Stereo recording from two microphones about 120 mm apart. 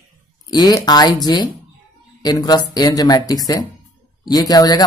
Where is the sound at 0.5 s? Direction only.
35° left (ahead or behind).